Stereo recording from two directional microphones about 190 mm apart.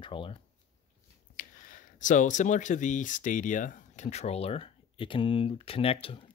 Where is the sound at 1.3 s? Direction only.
45° left (ahead or behind).